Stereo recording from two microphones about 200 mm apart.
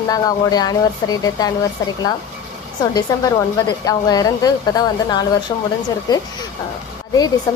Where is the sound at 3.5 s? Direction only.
20° left (ahead or behind).